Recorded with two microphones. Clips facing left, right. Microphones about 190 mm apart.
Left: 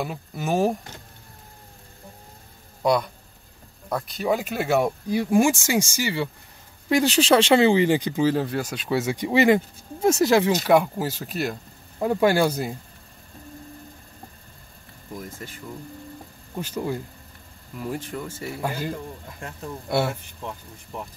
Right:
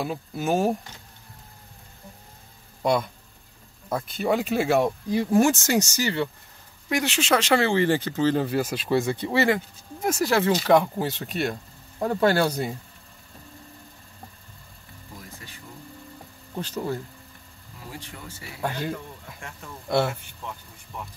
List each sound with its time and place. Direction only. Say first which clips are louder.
0.0 s speech: right 1 dB; centre (ahead or behind)
2.8 s speech: left 2 dB; centre (ahead or behind)
4.8 s speech: even; 10° left (ahead or behind)
6.9 s speech: left 5 dB; 30° left (ahead or behind); by 8.5 s 10° left (ahead or behind)
8.5 s speech: right 2 dB; centre (ahead or behind)
9.1 s speech: left 4 dB; 15° left (ahead or behind)
16.5 s speech: left 1 dB; 10° left (ahead or behind)
18.6 s speech: right 1 dB; 5° left (ahead or behind)
20.4 s speech: left 3 dB; 35° left (ahead or behind)